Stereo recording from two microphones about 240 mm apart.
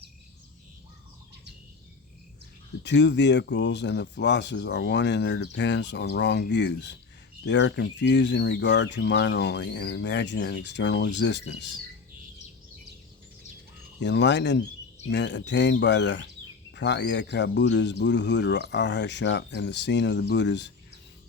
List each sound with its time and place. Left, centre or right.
2.8 s speech: left
14.0 s speech: left